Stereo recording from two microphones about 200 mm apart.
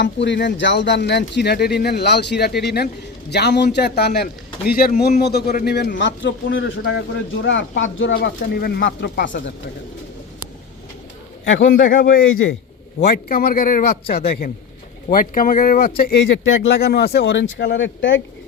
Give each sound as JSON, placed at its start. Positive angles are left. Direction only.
{"t": 0.0, "sound": "a man's voice", "side_deg": 60}
{"t": 8.1, "sound": "a man's voice", "side_deg": 50}
{"t": 11.4, "sound": "speech", "side_deg": 70}
{"t": 11.7, "sound": "a man's voice", "side_deg": 45}
{"t": 12.2, "sound": "a man's voice", "side_deg": 85}
{"t": 13.1, "sound": "a man's voice", "side_deg": 50}
{"t": 16.8, "sound": "speech", "side_deg": 55}